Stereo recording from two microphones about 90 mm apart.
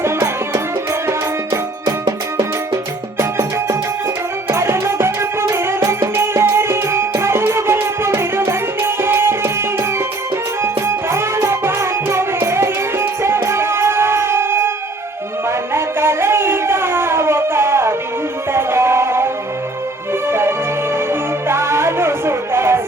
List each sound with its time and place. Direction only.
0.0 s music: 30° right (ahead or behind)
3.2 s music: 35° right (ahead or behind)